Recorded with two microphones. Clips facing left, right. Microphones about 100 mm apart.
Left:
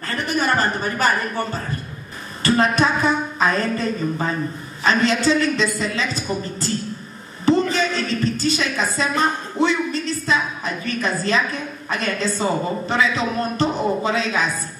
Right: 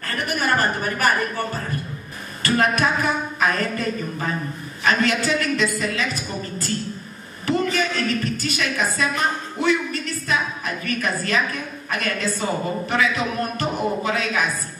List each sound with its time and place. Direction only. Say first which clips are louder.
0.1 s a man's voice: left 2 dB; 25° left (ahead or behind)
7.4 s music: left 4 dB; 25° left (ahead or behind)
9.6 s a woman's voice: left 2 dB; 25° left (ahead or behind)